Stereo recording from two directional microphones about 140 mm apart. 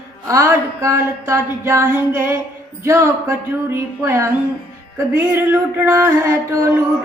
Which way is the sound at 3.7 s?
20° right (ahead or behind).